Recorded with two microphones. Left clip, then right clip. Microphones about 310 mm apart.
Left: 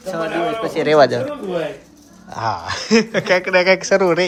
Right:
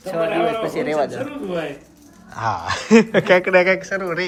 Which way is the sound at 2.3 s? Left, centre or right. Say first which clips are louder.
Even; centre.